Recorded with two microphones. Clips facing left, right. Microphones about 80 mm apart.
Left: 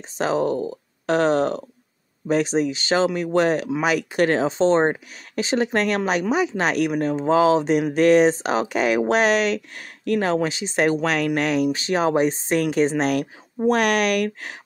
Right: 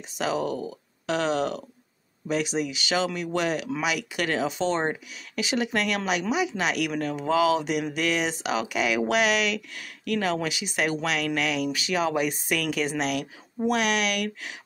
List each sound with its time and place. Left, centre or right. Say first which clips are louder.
0.2 s speech: left 6 dB; left